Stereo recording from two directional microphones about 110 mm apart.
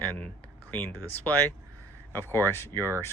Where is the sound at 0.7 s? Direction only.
15° left (ahead or behind).